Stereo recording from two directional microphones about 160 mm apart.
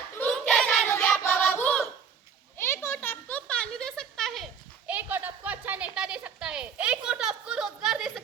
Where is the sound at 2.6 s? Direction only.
15° left (ahead or behind).